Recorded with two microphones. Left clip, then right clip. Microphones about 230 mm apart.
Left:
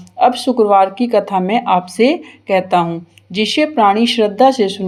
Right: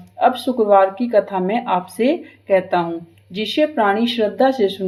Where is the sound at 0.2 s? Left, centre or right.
Left.